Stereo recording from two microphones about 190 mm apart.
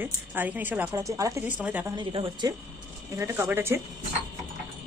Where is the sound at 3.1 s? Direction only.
15° right (ahead or behind).